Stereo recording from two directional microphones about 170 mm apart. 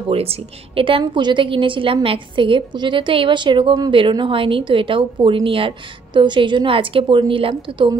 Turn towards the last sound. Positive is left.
turn(degrees=-30)  # may be behind; listen again after turning